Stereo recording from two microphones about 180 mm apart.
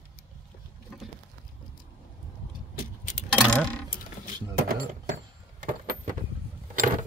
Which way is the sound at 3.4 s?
5° left (ahead or behind).